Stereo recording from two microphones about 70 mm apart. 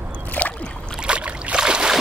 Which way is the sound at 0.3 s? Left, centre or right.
Left.